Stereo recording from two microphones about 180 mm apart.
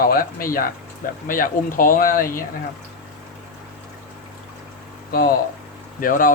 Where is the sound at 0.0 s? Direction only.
55° left (ahead or behind).